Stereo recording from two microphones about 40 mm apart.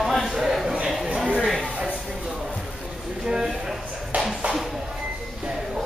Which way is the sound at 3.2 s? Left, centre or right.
Centre.